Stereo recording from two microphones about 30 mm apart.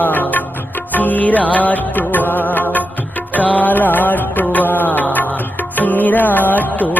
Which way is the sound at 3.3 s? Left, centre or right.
Left.